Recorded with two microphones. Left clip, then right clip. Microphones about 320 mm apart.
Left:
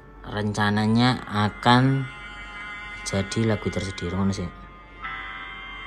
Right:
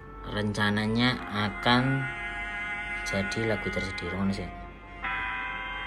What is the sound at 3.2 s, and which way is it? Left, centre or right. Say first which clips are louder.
Speech: left 5 dB; centre.